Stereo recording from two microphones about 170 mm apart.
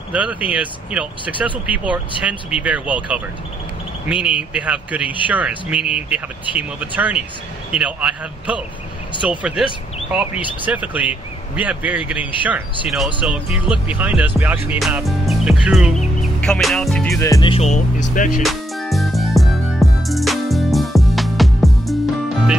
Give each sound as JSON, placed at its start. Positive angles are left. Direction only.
{"t": 0.1, "sound": "speech", "side_deg": -10}
{"t": 17.2, "sound": "speech", "side_deg": 20}
{"t": 17.5, "sound": "speech", "side_deg": 40}
{"t": 18.4, "sound": "music", "side_deg": 0}